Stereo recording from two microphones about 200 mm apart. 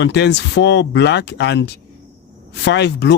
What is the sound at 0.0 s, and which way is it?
Speech, 60° left (ahead or behind).